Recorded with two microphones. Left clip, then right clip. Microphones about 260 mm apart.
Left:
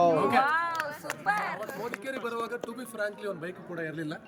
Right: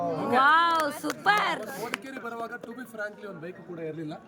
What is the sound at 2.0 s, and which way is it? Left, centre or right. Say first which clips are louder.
A man's voice: left 3 dB; centre.